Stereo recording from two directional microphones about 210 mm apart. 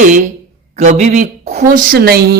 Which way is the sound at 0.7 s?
35° right (ahead or behind).